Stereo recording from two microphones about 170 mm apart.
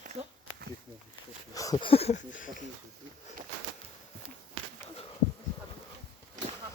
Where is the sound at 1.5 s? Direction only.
20° left (ahead or behind); by 2.6 s 45° left (ahead or behind).